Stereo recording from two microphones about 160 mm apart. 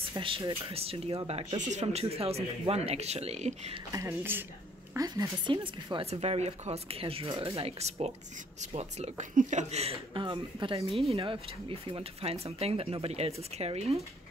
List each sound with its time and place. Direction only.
0.1 s speech: 30° right (ahead or behind)
3.9 s speech: 15° right (ahead or behind); by 13.9 s 40° right (ahead or behind)